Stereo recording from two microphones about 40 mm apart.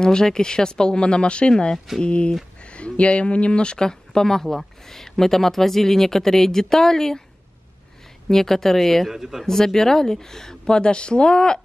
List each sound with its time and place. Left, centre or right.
0.0 s speech: centre
8.3 s speech: centre
9.1 s speech: centre
9.5 s speech: centre